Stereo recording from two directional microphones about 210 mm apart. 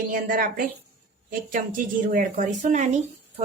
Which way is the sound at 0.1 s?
40° right (ahead or behind).